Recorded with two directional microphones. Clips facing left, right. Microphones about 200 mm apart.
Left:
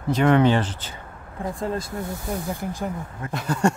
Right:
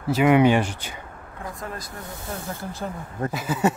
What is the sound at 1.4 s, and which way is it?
Speech, 30° left (ahead or behind).